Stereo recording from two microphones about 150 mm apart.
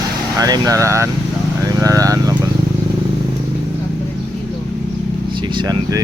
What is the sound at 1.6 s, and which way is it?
Vehicle, 20° right (ahead or behind).